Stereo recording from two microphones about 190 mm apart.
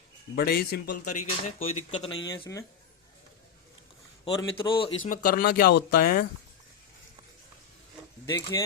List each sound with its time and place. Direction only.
0.3 s speech: 55° left (ahead or behind)
1.0 s a man's voice: 35° left (ahead or behind); by 2.6 s 20° left (ahead or behind)
4.3 s a man's voice: 25° left (ahead or behind)
5.0 s speech: 45° left (ahead or behind)
8.3 s speech: 20° left (ahead or behind)